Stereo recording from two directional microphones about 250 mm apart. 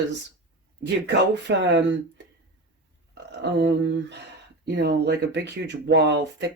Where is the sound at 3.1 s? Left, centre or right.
Right.